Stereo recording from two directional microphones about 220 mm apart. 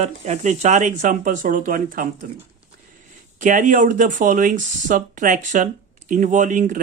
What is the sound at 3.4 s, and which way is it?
Speech, 35° right (ahead or behind).